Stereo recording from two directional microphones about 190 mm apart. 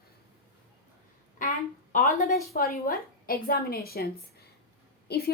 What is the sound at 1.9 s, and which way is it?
A woman's voice, 45° left (ahead or behind).